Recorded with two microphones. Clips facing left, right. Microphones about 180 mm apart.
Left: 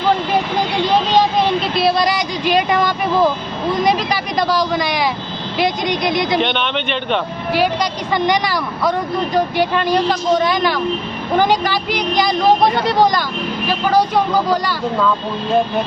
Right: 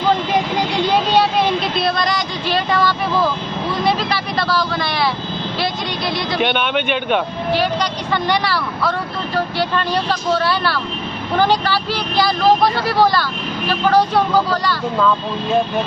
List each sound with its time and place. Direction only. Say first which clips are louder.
2.4 s a sound: left 3 dB; 15° left (ahead or behind)
6.4 s a man's voice: right 1 dB; 5° right (ahead or behind)
7.5 s speech: left 2 dB; 10° left (ahead or behind)